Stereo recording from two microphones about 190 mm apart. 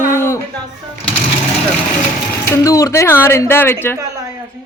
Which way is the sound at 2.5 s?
15° left (ahead or behind).